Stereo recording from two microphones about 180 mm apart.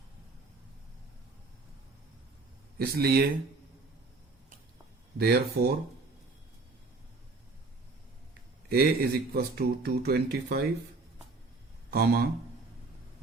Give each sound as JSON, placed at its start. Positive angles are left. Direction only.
{"t": 2.7, "sound": "speech", "side_deg": -60}
{"t": 5.1, "sound": "speech", "side_deg": -60}
{"t": 8.7, "sound": "speech", "side_deg": -60}
{"t": 11.9, "sound": "speech", "side_deg": -55}